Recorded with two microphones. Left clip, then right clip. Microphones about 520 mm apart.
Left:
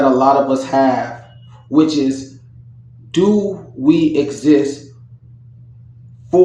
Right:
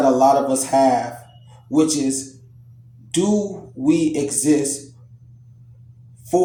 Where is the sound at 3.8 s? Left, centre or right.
Right.